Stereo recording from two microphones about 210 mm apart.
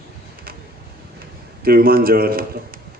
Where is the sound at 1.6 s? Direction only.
45° right (ahead or behind).